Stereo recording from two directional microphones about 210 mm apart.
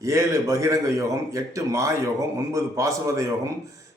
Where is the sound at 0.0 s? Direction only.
15° right (ahead or behind).